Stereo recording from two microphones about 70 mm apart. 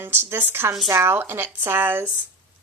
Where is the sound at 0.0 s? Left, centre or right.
Right.